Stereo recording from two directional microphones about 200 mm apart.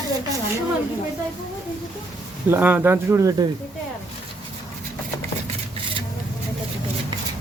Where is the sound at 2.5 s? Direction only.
10° right (ahead or behind).